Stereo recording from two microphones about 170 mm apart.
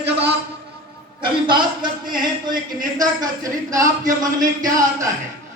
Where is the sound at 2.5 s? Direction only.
55° right (ahead or behind).